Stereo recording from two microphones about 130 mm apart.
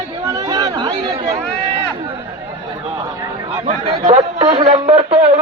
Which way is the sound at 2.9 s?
35° right (ahead or behind).